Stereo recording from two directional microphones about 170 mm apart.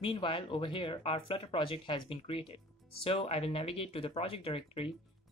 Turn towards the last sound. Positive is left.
turn(degrees=35)  # may be behind; listen again after turning